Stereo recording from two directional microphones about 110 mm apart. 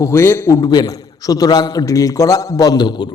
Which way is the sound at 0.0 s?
25° left (ahead or behind).